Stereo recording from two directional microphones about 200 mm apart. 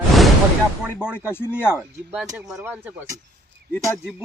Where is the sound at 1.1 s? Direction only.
10° left (ahead or behind).